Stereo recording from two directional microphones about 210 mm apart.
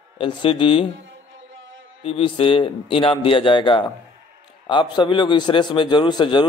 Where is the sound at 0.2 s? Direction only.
25° left (ahead or behind).